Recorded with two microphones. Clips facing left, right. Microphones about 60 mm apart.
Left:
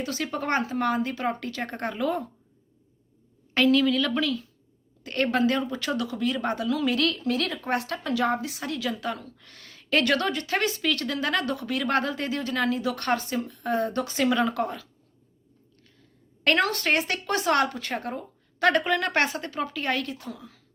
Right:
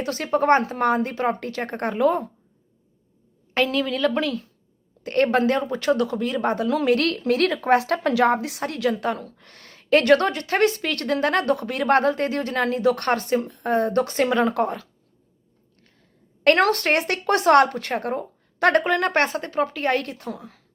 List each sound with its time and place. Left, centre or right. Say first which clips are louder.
0.0 s a woman's voice: right 8 dB; right
3.5 s a woman's voice: left 1 dB; right
6.7 s a woman's voice: right 5 dB; right
14.3 s a woman's voice: right 4 dB; right
16.4 s a woman's voice: right 6 dB; right